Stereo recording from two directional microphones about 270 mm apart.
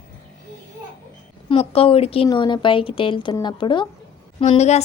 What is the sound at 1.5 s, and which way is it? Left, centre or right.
A woman's voice, left.